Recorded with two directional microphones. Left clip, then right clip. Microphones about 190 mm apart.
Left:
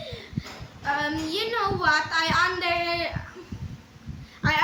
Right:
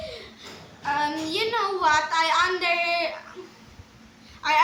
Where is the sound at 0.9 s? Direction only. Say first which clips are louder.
Right 4 dB; 15° right (ahead or behind).